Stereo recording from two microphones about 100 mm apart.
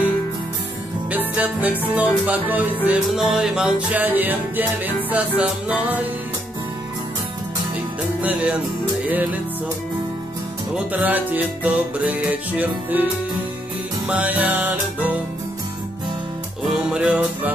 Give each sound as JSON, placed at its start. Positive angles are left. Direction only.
{"t": 1.1, "sound": "music", "side_deg": -15}
{"t": 3.2, "sound": "music", "side_deg": -5}
{"t": 8.2, "sound": "music", "side_deg": -15}
{"t": 10.7, "sound": "music", "side_deg": -10}
{"t": 14.0, "sound": "music", "side_deg": -15}
{"t": 16.6, "sound": "music", "side_deg": -5}